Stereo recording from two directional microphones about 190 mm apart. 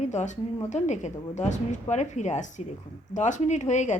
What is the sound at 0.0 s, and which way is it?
A woman's voice, 40° left (ahead or behind).